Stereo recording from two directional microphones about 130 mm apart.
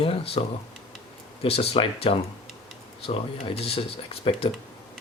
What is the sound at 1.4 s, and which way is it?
Speech, 50° left (ahead or behind).